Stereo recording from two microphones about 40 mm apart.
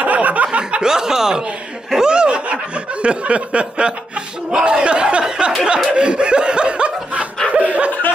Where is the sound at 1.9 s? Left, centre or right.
Centre.